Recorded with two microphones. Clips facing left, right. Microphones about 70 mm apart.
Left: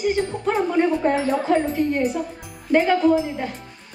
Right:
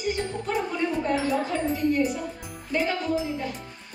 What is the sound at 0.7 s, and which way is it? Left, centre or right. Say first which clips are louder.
Speech: left 7 dB; left.